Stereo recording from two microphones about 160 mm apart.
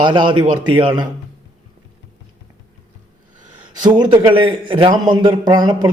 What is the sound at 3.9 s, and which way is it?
A man's voice, 30° right (ahead or behind).